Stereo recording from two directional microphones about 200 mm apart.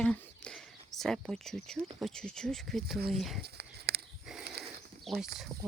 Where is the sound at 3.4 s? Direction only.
55° right (ahead or behind).